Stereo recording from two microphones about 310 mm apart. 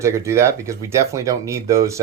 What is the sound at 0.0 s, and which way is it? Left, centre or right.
Speech, centre.